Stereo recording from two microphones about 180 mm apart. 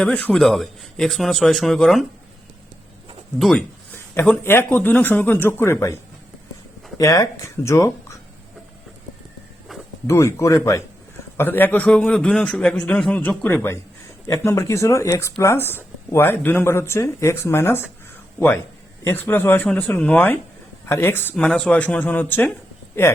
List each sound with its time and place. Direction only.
0.0 s speech: 5° left (ahead or behind)
3.3 s speech: centre (ahead or behind)
7.0 s speech: 20° left (ahead or behind)
9.7 s a sound: centre (ahead or behind)
10.1 s speech: 15° left (ahead or behind)